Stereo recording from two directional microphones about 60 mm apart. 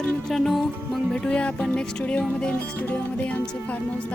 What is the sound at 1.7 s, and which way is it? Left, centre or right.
Speech, centre.